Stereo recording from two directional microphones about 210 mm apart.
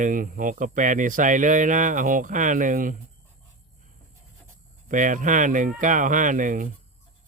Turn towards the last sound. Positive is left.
turn(degrees=-40)  # may be behind; listen again after turning